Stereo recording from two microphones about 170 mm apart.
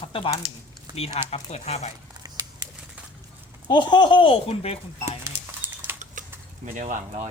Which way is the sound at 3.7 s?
25° left (ahead or behind).